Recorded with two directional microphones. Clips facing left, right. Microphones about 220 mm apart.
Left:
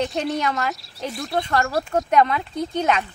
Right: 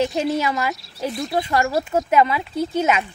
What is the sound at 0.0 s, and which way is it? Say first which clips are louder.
Speech: right 3 dB; centre (ahead or behind).